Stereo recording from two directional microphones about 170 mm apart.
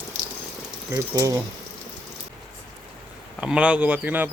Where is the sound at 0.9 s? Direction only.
20° right (ahead or behind).